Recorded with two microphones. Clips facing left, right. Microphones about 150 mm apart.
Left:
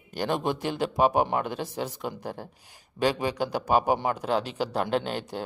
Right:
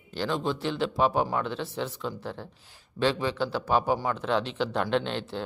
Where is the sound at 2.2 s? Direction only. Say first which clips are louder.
Left 1 dB; 40° left (ahead or behind).